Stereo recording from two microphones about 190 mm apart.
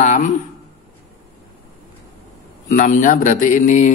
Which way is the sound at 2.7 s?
45° left (ahead or behind).